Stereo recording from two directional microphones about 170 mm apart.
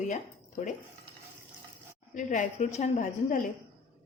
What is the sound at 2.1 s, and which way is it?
A woman's voice, 45° left (ahead or behind).